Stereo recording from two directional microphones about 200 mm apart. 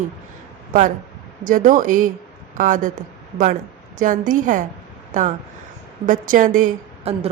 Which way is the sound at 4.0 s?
40° right (ahead or behind).